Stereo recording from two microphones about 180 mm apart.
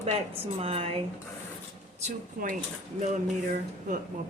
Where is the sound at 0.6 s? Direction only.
30° right (ahead or behind).